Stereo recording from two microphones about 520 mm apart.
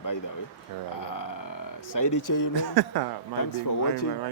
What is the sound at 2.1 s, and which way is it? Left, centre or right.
Speech, left.